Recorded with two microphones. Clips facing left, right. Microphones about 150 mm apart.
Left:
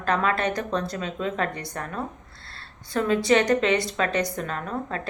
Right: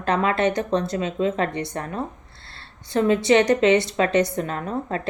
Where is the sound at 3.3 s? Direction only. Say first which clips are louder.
Right 4 dB; 25° right (ahead or behind).